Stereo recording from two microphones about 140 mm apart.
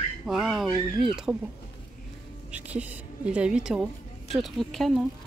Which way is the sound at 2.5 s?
10° right (ahead or behind).